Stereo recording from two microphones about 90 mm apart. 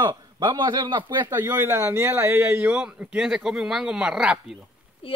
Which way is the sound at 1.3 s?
25° right (ahead or behind).